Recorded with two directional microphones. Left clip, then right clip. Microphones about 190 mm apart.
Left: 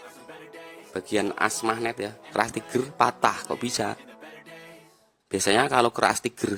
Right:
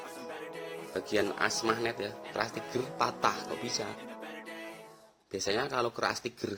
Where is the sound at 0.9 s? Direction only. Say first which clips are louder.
Left 5 dB; 35° left (ahead or behind).